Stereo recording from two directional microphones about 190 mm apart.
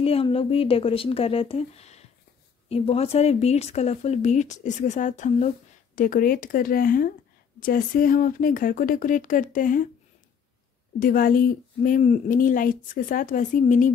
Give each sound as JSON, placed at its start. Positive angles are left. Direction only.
{"t": 0.0, "sound": "speech", "side_deg": 30}
{"t": 11.0, "sound": "speech", "side_deg": 45}